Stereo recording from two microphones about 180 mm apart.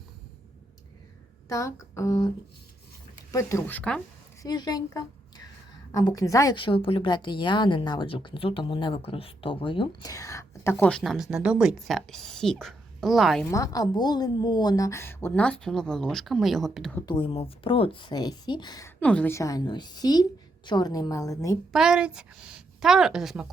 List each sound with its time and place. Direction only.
1.5 s a woman's voice: 15° left (ahead or behind)
3.3 s a woman's voice: 15° left (ahead or behind)
4.4 s a woman's voice: 20° left (ahead or behind); by 13.5 s centre (ahead or behind)
13.5 s a woman's voice: 20° left (ahead or behind); by 17.0 s centre (ahead or behind)
17.1 s a woman's voice: 30° left (ahead or behind)
18.9 s a woman's voice: 10° left (ahead or behind)
21.7 s a woman's voice: 5° right (ahead or behind)